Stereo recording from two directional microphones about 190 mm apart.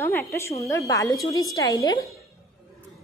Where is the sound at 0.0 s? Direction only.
15° left (ahead or behind).